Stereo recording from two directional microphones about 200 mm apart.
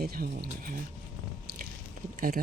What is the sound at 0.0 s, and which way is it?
Speech, 50° right (ahead or behind).